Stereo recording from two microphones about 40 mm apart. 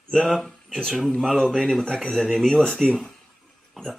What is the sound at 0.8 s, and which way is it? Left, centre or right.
Speech, centre.